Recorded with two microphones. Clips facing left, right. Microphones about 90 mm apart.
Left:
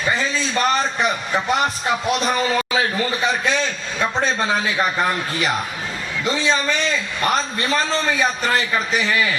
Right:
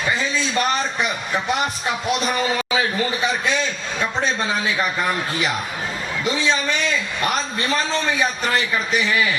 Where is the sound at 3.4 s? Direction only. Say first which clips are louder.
Left 1 dB; 35° left (ahead or behind).